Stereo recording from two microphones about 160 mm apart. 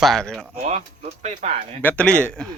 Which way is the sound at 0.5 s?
45° right (ahead or behind).